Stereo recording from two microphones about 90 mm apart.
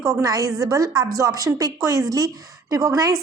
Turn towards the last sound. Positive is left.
turn(degrees=-45)  # may be behind; listen again after turning